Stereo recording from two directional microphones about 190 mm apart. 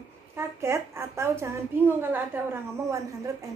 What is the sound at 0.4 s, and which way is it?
A woman's voice, 15° right (ahead or behind).